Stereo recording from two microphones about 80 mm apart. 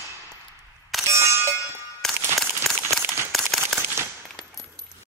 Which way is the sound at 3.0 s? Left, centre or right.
Right.